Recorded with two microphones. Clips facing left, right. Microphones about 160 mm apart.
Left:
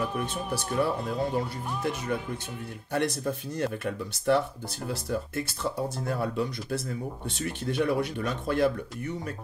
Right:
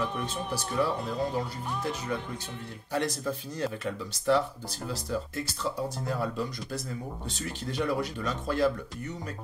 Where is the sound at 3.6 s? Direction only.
55° left (ahead or behind).